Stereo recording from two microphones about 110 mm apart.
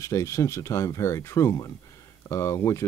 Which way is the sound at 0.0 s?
30° left (ahead or behind).